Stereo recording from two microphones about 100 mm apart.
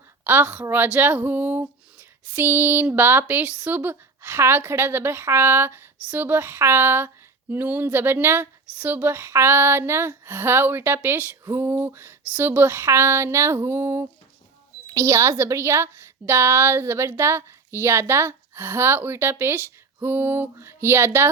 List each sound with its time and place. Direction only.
0.3 s speech: 20° right (ahead or behind)